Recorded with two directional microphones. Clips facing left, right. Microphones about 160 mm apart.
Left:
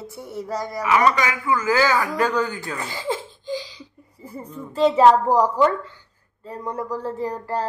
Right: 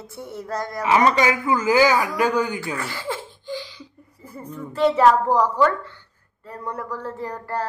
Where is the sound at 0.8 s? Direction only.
25° right (ahead or behind).